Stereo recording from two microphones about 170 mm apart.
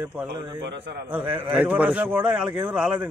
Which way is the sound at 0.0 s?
10° right (ahead or behind).